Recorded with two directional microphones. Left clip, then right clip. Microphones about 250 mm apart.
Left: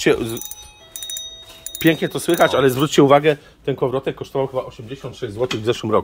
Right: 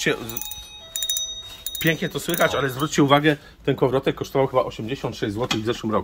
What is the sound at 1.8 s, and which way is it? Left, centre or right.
Speech, centre.